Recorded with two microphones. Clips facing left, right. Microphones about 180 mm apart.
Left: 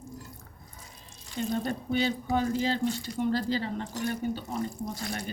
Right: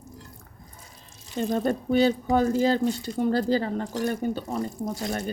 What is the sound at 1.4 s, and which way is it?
Speech, 45° right (ahead or behind).